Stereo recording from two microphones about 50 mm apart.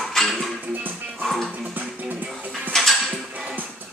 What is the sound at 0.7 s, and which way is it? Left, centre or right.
Music, right.